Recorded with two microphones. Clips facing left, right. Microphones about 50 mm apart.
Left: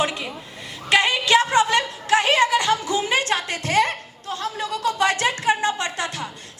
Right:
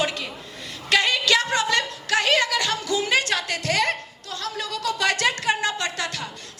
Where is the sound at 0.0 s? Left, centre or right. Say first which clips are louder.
Left 2 dB; left.